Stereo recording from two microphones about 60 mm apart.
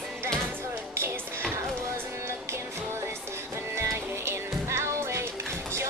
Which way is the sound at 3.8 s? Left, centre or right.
Right.